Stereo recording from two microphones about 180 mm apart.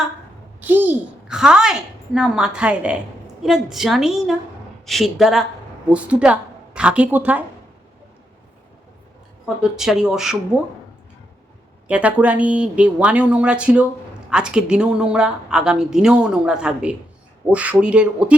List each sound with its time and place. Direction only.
0.6 s a woman's voice: 10° right (ahead or behind)
9.6 s speech: 5° right (ahead or behind)
11.9 s speech: 5° right (ahead or behind)